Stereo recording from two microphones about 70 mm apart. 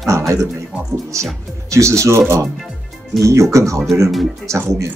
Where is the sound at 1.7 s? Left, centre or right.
Right.